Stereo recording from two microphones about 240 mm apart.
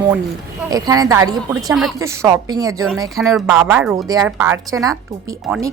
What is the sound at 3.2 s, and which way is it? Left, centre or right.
Speech, centre.